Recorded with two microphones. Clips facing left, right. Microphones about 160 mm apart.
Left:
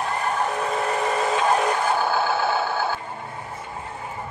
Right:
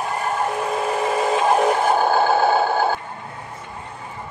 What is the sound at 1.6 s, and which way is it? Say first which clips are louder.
Music: right 5 dB; 30° right (ahead or behind).